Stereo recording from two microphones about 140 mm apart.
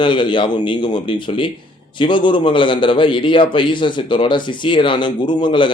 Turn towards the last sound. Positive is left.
turn(degrees=35)  # may be behind; listen again after turning